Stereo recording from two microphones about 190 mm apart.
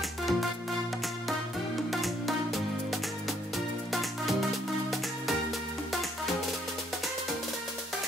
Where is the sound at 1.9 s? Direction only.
Centre (ahead or behind).